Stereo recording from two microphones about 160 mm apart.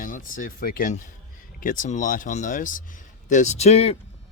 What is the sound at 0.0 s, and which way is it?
A man's voice, 60° left (ahead or behind).